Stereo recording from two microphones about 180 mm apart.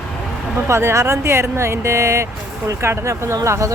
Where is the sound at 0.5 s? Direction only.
15° right (ahead or behind).